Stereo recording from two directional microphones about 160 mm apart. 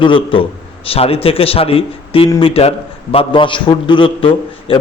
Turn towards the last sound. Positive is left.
turn(degrees=35)  # may be behind; listen again after turning